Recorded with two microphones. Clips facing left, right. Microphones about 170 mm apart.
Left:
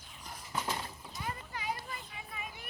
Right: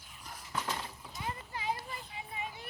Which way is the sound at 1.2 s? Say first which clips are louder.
Right 1 dB; 25° right (ahead or behind).